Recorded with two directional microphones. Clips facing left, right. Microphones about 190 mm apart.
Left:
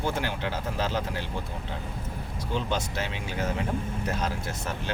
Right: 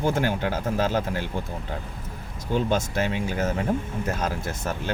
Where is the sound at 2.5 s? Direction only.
45° right (ahead or behind).